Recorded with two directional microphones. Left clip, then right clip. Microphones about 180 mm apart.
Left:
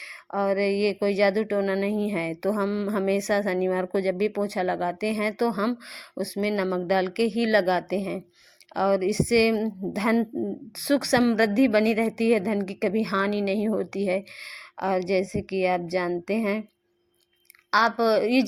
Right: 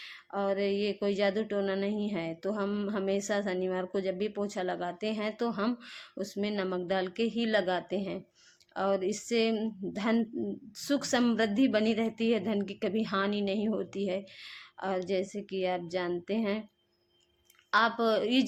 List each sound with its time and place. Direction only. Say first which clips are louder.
0.0 s speech: left 6 dB; 35° left (ahead or behind)
17.7 s speech: left 6 dB; 30° left (ahead or behind)